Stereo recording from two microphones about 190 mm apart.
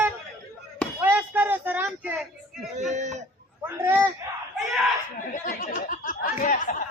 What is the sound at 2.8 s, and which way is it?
Speech, 40° right (ahead or behind).